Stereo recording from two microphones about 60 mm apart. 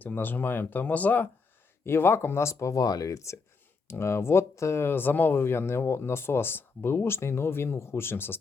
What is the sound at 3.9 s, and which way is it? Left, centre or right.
Speech, left.